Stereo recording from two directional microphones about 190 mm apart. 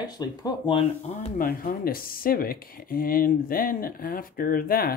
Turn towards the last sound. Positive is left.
turn(degrees=50)  # may be behind; listen again after turning